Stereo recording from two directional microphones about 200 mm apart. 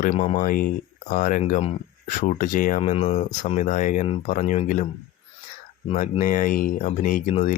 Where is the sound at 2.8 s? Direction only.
30° left (ahead or behind).